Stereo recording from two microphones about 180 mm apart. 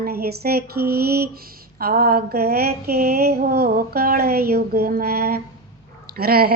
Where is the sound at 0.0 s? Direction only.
60° right (ahead or behind).